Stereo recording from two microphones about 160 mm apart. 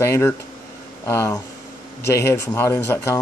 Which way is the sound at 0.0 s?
15° left (ahead or behind).